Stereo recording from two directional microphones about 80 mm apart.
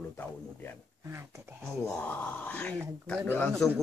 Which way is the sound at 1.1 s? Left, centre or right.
Right.